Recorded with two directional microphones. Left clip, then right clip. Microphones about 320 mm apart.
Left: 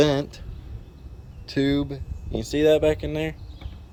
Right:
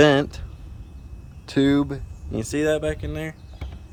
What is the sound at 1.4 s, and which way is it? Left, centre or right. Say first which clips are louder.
Speech: right 4 dB; centre.